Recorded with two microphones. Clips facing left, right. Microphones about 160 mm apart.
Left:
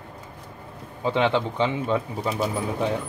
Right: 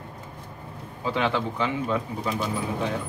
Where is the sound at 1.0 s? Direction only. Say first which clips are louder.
Left 3 dB; 25° left (ahead or behind).